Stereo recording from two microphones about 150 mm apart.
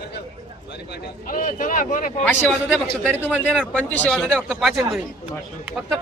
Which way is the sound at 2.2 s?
10° left (ahead or behind).